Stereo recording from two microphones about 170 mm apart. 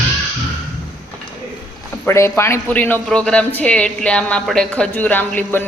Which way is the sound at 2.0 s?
15° left (ahead or behind).